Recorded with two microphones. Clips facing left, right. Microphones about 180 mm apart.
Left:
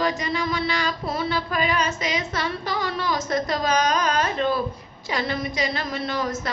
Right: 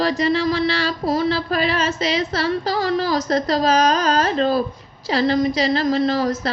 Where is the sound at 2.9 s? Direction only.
35° right (ahead or behind).